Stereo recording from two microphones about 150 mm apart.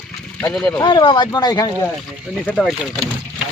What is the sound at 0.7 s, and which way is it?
Speech, 25° left (ahead or behind).